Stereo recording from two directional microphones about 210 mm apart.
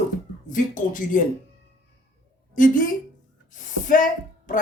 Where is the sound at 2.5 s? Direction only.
40° left (ahead or behind).